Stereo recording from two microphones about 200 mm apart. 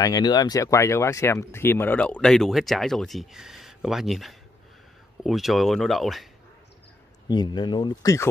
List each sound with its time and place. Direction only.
0.0 s speech: 20° left (ahead or behind); by 6.2 s centre (ahead or behind)
7.2 s speech: 20° left (ahead or behind)